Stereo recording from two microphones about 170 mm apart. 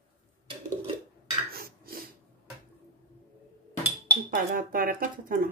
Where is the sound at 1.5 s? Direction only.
60° right (ahead or behind).